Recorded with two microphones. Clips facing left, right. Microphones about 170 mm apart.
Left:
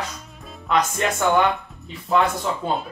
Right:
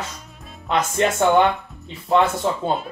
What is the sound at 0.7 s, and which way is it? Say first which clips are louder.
Speech: right 1 dB; 25° right (ahead or behind).